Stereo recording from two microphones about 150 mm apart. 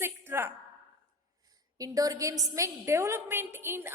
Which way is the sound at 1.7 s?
25° right (ahead or behind).